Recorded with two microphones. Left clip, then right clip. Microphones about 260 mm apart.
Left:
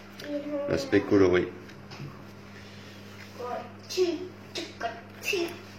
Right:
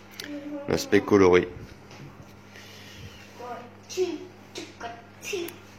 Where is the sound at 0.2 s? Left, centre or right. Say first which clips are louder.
Left 4 dB; right.